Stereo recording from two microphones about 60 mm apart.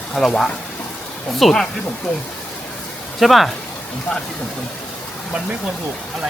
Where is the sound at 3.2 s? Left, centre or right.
Centre.